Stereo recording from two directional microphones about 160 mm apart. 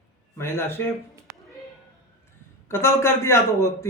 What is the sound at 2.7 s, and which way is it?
Speech, 15° left (ahead or behind).